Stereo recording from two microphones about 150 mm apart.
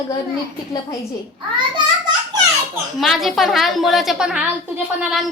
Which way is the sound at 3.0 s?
Centre (ahead or behind).